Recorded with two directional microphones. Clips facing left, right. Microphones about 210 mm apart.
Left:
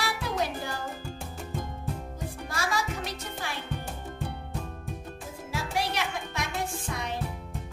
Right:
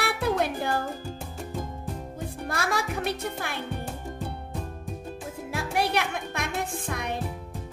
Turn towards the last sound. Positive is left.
turn(degrees=-60)  # may be behind; listen again after turning